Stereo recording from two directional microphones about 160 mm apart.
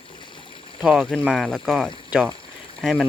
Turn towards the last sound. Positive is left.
turn(degrees=0)  # may be behind; listen again after turning